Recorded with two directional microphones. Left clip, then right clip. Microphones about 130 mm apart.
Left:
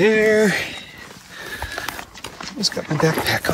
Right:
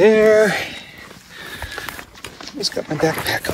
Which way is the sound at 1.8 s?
50° left (ahead or behind).